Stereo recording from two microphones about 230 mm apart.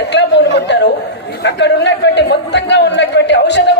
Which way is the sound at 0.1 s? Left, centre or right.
Left.